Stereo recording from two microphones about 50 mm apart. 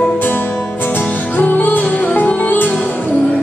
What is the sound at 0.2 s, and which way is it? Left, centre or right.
Music, left.